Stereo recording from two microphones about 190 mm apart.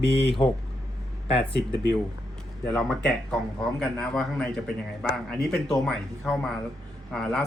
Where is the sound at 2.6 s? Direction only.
5° left (ahead or behind).